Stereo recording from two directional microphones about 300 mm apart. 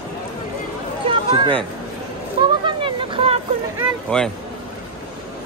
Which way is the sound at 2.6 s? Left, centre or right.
Centre.